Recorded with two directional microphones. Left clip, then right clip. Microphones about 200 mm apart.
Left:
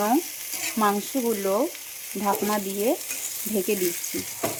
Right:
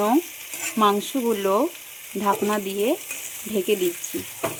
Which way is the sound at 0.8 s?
5° right (ahead or behind).